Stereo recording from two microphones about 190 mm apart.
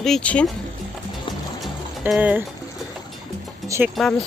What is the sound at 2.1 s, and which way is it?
Speech, 10° right (ahead or behind).